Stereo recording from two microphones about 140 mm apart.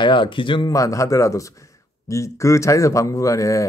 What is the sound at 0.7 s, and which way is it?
Speech, 25° left (ahead or behind).